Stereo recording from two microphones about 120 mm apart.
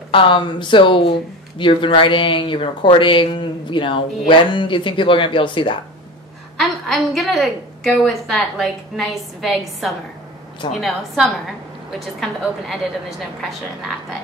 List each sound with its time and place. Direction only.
0.1 s speech: 45° left (ahead or behind)
6.6 s a woman's voice: centre (ahead or behind)